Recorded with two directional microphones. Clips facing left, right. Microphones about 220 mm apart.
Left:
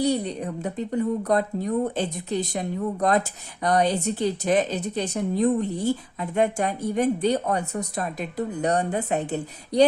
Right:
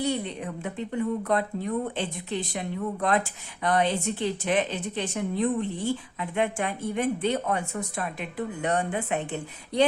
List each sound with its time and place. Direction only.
0.0 s speech: 40° left (ahead or behind)